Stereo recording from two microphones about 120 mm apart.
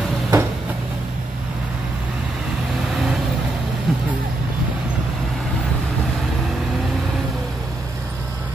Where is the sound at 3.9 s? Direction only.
5° right (ahead or behind).